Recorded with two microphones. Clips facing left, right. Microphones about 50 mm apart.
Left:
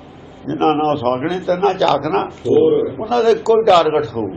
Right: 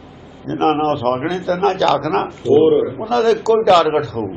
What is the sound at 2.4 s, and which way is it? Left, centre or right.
Speech, right.